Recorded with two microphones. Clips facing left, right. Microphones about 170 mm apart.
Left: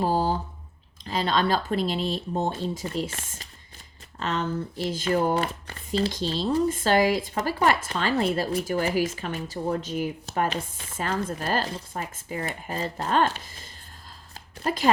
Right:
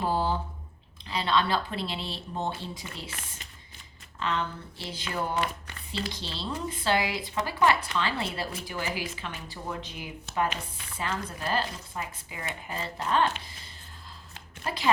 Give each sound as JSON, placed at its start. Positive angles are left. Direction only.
{"t": 0.0, "sound": "a sound", "side_deg": 40}
{"t": 1.0, "sound": "speech", "side_deg": 40}
{"t": 14.6, "sound": "speech", "side_deg": 45}